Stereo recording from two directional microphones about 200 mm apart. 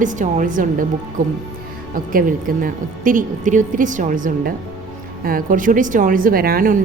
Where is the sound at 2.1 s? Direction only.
45° right (ahead or behind).